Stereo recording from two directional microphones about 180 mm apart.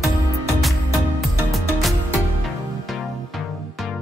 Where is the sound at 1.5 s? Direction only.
Centre (ahead or behind).